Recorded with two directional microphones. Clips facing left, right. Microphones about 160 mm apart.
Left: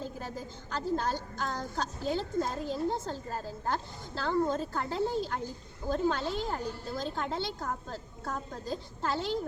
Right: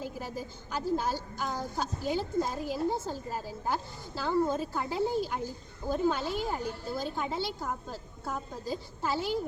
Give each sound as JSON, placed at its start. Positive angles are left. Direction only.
{"t": 0.0, "sound": "a woman's voice", "side_deg": -10}